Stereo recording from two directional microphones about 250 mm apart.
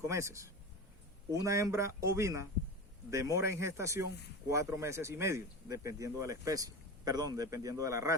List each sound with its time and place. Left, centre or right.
0.1 s speech: centre